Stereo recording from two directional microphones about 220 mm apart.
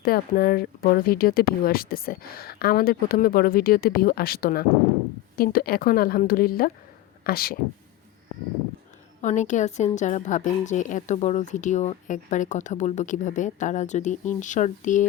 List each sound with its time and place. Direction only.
0.0 s a woman's voice: 40° left (ahead or behind)
9.2 s a woman's voice: 35° left (ahead or behind)